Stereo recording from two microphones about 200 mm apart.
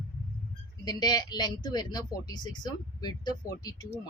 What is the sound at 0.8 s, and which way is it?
A woman's voice, 20° left (ahead or behind).